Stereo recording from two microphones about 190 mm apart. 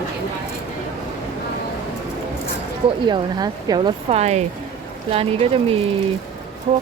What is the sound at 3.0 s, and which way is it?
Speech, 20° right (ahead or behind).